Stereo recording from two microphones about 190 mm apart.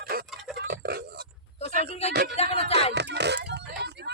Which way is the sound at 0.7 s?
55° right (ahead or behind).